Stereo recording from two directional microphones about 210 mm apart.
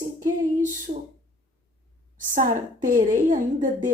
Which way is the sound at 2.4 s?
40° right (ahead or behind).